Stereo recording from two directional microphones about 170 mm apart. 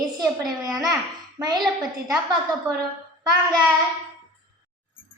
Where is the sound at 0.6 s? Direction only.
20° right (ahead or behind).